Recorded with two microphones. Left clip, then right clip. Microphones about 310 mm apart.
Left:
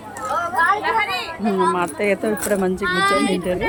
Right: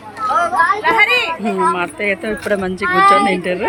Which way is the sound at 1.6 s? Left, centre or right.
Centre.